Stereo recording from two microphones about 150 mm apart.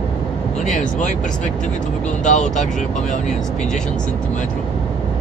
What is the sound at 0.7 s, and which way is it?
Speech, 60° left (ahead or behind).